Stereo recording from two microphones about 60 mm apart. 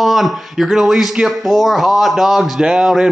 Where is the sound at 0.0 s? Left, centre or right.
Centre.